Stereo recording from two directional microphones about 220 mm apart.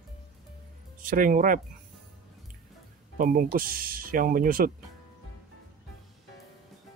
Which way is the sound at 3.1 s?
40° right (ahead or behind).